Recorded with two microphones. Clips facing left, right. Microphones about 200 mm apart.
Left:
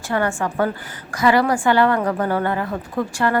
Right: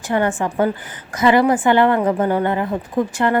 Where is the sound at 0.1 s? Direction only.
20° right (ahead or behind).